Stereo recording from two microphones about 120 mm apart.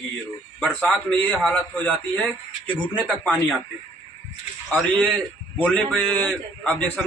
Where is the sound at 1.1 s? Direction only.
15° left (ahead or behind).